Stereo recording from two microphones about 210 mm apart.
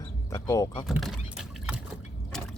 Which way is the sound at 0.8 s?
Centre (ahead or behind).